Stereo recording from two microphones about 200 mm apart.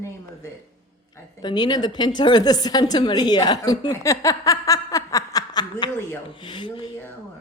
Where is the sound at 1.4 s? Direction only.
20° left (ahead or behind).